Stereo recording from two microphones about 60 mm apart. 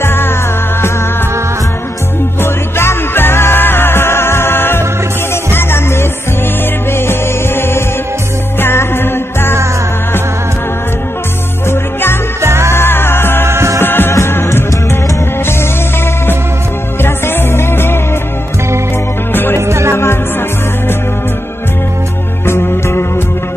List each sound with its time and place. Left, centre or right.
0.0 s music: left
2.4 s music: left
11.7 s music: left
12.4 s music: right
12.7 s music: left
13.5 s music: right
13.7 s music: left
17.0 s music: left
19.3 s music: left
19.7 s music: right
22.5 s music: left